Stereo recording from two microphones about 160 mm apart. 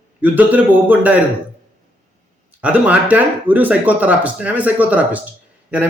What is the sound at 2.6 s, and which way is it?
Speech, 10° right (ahead or behind).